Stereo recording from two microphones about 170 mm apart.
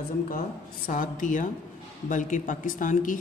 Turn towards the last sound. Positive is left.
turn(degrees=50)  # may be behind; listen again after turning